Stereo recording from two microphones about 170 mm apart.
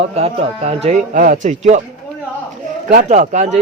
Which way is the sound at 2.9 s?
45° right (ahead or behind).